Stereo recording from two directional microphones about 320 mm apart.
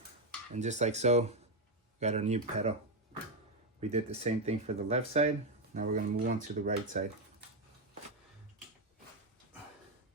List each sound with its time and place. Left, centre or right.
0.5 s speech: right
3.8 s speech: centre